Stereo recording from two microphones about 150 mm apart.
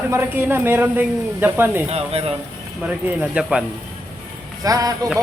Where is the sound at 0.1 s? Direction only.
15° right (ahead or behind).